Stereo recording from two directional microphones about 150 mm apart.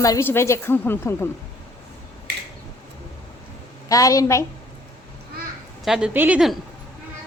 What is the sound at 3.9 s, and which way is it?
Speech, 20° left (ahead or behind).